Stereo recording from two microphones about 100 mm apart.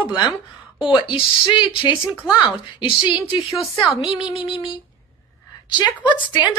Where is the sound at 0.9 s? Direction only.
55° left (ahead or behind).